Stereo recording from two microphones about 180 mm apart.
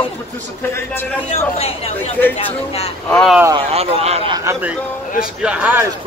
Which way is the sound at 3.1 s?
5° left (ahead or behind).